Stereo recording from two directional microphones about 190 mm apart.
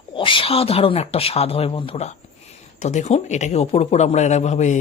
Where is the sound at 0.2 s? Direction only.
25° left (ahead or behind).